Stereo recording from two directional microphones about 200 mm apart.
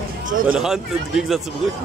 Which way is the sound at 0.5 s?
Centre (ahead or behind).